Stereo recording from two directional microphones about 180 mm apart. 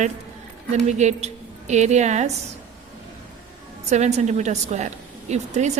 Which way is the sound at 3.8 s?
40° right (ahead or behind).